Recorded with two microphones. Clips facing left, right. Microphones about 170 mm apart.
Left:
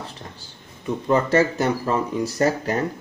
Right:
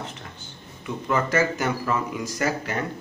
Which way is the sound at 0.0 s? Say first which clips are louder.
Even; 35° left (ahead or behind).